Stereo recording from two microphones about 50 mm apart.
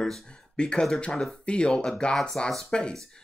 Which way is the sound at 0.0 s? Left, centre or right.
Centre.